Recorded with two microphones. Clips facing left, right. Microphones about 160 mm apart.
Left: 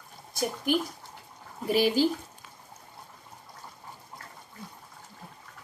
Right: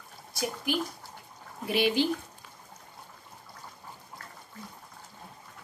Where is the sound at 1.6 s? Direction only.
40° left (ahead or behind).